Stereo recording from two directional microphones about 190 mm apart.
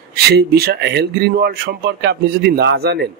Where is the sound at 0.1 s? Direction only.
55° right (ahead or behind).